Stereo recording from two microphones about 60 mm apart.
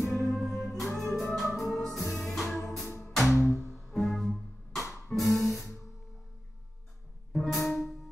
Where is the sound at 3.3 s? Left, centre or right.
Right.